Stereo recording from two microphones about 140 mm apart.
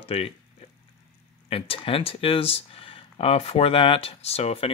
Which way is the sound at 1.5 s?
40° left (ahead or behind).